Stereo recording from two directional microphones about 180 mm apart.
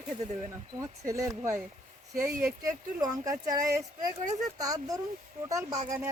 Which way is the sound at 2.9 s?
20° right (ahead or behind).